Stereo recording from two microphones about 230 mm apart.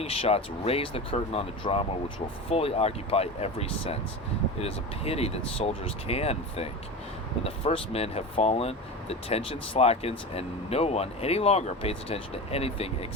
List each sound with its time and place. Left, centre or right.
0.0 s speech: left